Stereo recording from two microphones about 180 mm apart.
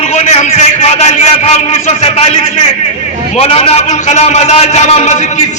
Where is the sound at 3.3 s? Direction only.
35° left (ahead or behind).